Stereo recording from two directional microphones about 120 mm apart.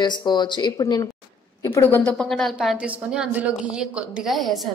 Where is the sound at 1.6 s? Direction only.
20° left (ahead or behind).